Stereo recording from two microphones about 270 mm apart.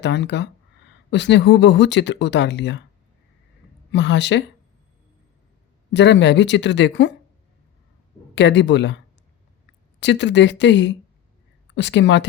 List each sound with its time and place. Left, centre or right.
0.0 s speech: left
3.9 s speech: left
5.9 s speech: left
8.4 s speech: left
10.0 s speech: left